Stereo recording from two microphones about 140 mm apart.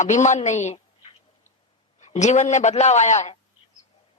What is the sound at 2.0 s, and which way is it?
A woman's voice, 55° left (ahead or behind).